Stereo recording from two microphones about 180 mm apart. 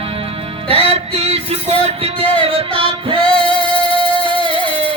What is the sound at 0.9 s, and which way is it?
Music, 35° right (ahead or behind).